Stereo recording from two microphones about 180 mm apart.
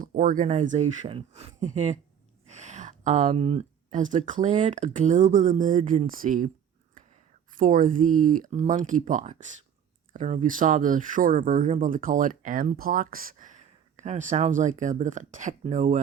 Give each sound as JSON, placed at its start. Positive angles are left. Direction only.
{"t": 0.0, "sound": "speech", "side_deg": -50}
{"t": 2.5, "sound": "a sound", "side_deg": -40}
{"t": 4.3, "sound": "speech", "side_deg": -45}
{"t": 7.5, "sound": "speech", "side_deg": -45}